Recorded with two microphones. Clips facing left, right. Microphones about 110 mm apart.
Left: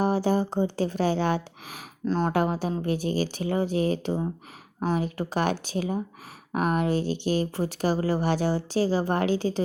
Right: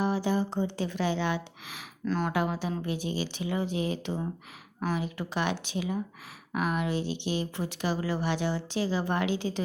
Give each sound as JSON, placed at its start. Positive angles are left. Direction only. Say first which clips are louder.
{"t": 0.0, "sound": "speech", "louder": "left 4 dB", "side_deg": 45}
{"t": 2.0, "sound": "speech", "louder": "left 4 dB", "side_deg": 30}
{"t": 2.3, "sound": "speech", "louder": "left 4 dB", "side_deg": 45}